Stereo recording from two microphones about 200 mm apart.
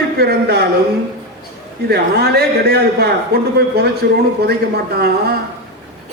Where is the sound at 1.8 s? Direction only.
50° right (ahead or behind).